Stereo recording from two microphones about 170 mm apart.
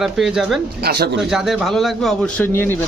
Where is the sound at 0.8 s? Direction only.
70° right (ahead or behind).